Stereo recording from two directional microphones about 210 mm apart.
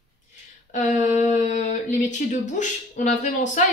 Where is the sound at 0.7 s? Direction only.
35° left (ahead or behind).